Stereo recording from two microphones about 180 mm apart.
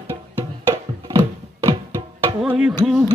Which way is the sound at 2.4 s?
5° right (ahead or behind).